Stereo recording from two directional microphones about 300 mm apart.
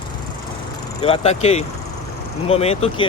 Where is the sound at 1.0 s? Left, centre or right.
Centre.